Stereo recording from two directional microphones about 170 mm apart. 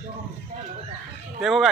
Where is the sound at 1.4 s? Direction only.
Centre (ahead or behind).